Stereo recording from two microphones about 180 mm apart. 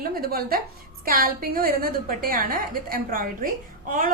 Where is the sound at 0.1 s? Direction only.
55° right (ahead or behind).